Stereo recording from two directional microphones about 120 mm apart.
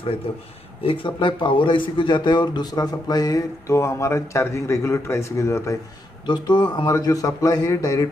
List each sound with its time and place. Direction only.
0.8 s a man's voice: 45° left (ahead or behind); by 5.8 s 25° left (ahead or behind)
6.2 s a man's voice: 40° left (ahead or behind)